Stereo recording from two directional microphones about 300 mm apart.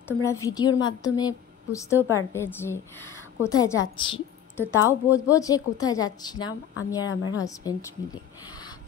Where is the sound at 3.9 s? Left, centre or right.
Centre.